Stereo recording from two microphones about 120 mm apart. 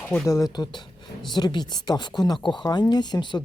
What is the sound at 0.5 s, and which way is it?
Speech, 35° left (ahead or behind).